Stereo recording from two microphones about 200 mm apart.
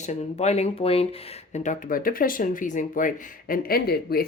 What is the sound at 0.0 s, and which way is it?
Speech, 35° left (ahead or behind).